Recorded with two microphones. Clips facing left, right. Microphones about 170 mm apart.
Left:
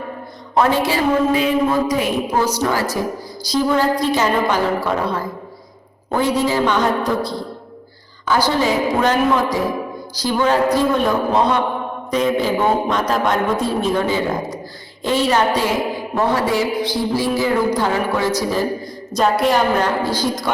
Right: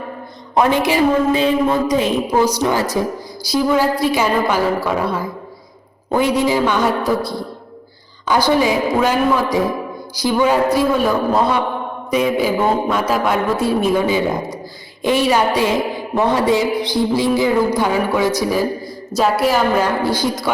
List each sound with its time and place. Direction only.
0.5 s speech: 15° right (ahead or behind)
2.4 s speech: 15° right (ahead or behind)
8.4 s a woman's voice: 15° right (ahead or behind)